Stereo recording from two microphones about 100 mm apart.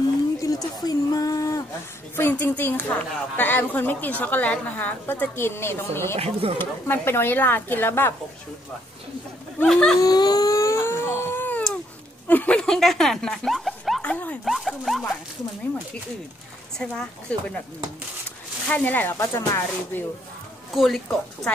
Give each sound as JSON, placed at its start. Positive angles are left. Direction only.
{"t": 0.4, "sound": "a sound", "side_deg": 35}
{"t": 2.1, "sound": "speech", "side_deg": 20}
{"t": 6.1, "sound": "speech", "side_deg": -90}
{"t": 6.6, "sound": "a woman's voice", "side_deg": 20}
{"t": 9.7, "sound": "speech", "side_deg": 5}
{"t": 9.9, "sound": "a sound", "side_deg": 40}
{"t": 12.3, "sound": "speech", "side_deg": 15}
{"t": 14.0, "sound": "speech", "side_deg": 15}
{"t": 14.4, "sound": "speech", "side_deg": 0}
{"t": 16.7, "sound": "speech", "side_deg": 5}
{"t": 18.7, "sound": "a woman's voice", "side_deg": 15}
{"t": 20.7, "sound": "speech", "side_deg": 0}